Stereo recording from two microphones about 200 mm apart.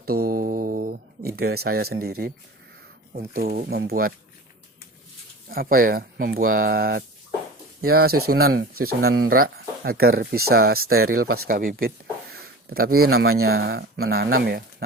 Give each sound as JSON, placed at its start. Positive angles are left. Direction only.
{"t": 0.3, "sound": "a sound", "side_deg": -45}
{"t": 3.1, "sound": "speech", "side_deg": -45}
{"t": 5.5, "sound": "speech", "side_deg": -45}
{"t": 8.5, "sound": "speech", "side_deg": -90}
{"t": 9.2, "sound": "speech", "side_deg": -45}
{"t": 10.8, "sound": "speech", "side_deg": -90}
{"t": 11.4, "sound": "speech", "side_deg": -45}
{"t": 12.3, "sound": "a sound", "side_deg": -50}
{"t": 13.1, "sound": "speech", "side_deg": -90}
{"t": 13.7, "sound": "speech", "side_deg": -50}
{"t": 14.0, "sound": "speech", "side_deg": -90}
{"t": 14.3, "sound": "speech", "side_deg": -50}